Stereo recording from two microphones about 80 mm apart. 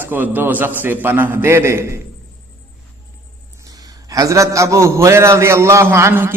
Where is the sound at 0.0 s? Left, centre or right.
Right.